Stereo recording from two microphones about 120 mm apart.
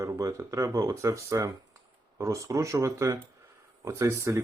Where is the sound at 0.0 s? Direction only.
25° right (ahead or behind).